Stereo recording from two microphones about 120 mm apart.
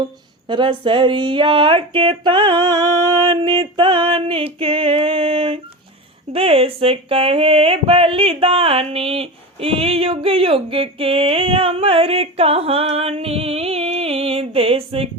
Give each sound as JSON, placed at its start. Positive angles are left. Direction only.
{"t": 0.0, "sound": "speech", "side_deg": -40}